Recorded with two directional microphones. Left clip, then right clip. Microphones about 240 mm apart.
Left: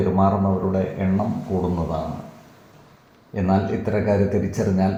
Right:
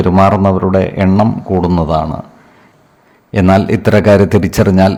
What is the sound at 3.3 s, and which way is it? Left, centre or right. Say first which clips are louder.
A man's voice: right 12 dB; right.